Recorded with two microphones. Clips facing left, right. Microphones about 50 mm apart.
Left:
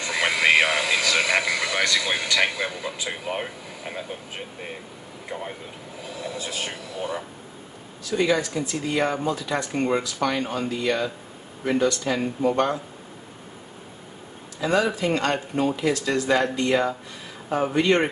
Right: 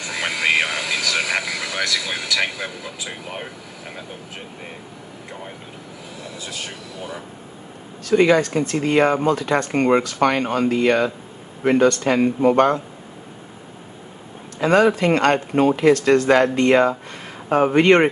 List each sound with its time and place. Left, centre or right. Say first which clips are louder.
0.1 s a sound: left 1 dB; centre
3.1 s speech: left 4 dB; centre
6.3 s speech: right 1 dB; centre
8.0 s speech: right 7 dB; right
14.6 s speech: right 7 dB; right